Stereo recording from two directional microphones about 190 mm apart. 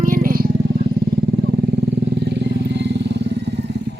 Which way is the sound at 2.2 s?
65° right (ahead or behind).